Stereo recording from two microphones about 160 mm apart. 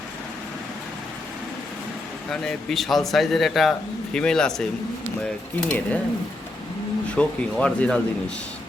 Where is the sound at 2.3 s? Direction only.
5° left (ahead or behind).